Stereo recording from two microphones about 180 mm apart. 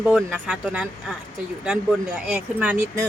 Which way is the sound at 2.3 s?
10° right (ahead or behind).